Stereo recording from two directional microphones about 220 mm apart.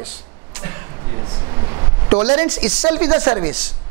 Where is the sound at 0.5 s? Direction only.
15° right (ahead or behind).